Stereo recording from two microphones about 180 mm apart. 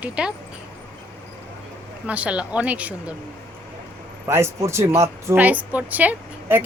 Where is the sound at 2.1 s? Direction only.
5° right (ahead or behind).